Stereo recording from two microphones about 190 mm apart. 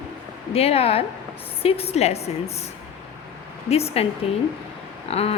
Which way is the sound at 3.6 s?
35° left (ahead or behind).